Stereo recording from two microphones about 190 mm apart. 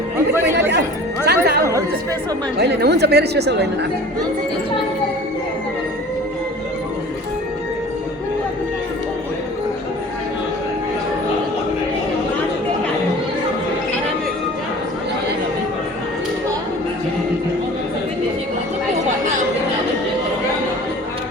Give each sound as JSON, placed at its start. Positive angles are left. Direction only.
{"t": 1.2, "sound": "music", "side_deg": -60}
{"t": 2.6, "sound": "speech", "side_deg": -60}